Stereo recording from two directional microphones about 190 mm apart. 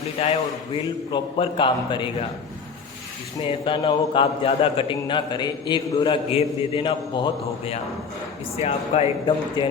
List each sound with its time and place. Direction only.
0.2 s a man's voice: 30° left (ahead or behind)
3.4 s a man's voice: 25° left (ahead or behind)
8.5 s speech: 35° left (ahead or behind)